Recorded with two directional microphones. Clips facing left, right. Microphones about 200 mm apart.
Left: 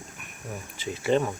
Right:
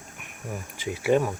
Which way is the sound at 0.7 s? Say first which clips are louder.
Right 2 dB; 10° right (ahead or behind).